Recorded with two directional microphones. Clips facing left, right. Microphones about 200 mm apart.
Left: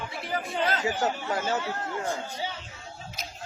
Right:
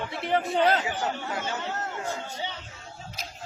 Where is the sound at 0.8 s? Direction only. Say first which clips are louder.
Left 3 dB; 40° left (ahead or behind).